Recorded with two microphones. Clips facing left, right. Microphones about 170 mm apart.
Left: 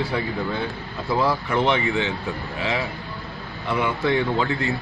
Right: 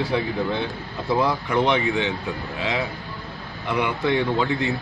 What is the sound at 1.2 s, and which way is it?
Speech, 15° right (ahead or behind).